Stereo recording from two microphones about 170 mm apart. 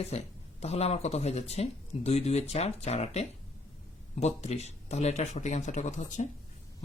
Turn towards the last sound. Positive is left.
turn(degrees=45)  # may be behind; listen again after turning